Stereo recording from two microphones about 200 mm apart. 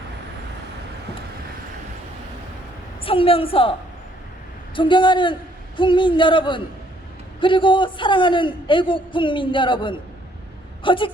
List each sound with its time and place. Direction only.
3.0 s a man's voice: 25° left (ahead or behind)